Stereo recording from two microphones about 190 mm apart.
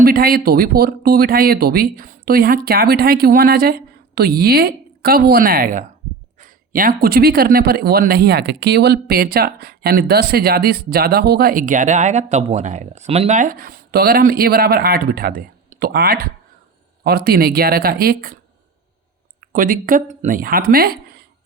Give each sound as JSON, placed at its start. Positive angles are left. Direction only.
{"t": 0.0, "sound": "speech", "side_deg": -50}
{"t": 19.4, "sound": "speech", "side_deg": -45}